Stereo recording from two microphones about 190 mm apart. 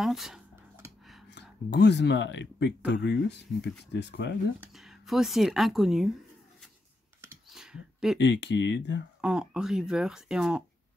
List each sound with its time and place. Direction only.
0.0 s a sound: centre (ahead or behind)
1.3 s speech: 65° left (ahead or behind)
4.6 s speech: centre (ahead or behind)
7.2 s a sound: 5° right (ahead or behind)
8.2 s speech: 65° left (ahead or behind)
9.2 s speech: 5° right (ahead or behind)